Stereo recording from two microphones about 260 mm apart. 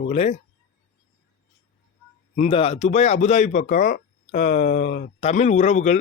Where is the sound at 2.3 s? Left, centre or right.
Left.